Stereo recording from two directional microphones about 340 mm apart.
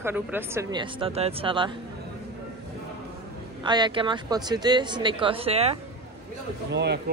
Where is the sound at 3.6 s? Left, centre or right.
Centre.